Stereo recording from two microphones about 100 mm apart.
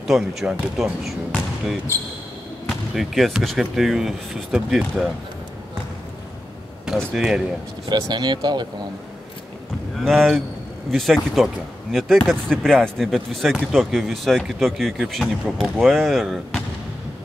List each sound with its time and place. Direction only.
0.0 s speech: centre (ahead or behind)
2.7 s speech: centre (ahead or behind)
7.2 s speech: 5° right (ahead or behind)
7.9 s speech: 45° right (ahead or behind)
10.0 s speech: 5° left (ahead or behind)